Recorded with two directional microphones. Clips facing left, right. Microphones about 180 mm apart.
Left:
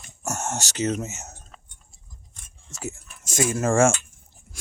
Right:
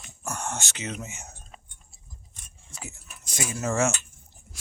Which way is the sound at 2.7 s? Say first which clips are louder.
Left 9 dB; 45° left (ahead or behind).